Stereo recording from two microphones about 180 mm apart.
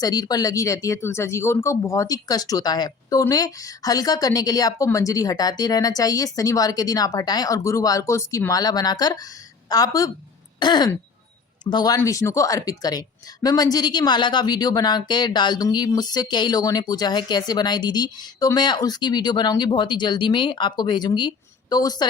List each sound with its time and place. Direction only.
0.0 s speech: 20° left (ahead or behind)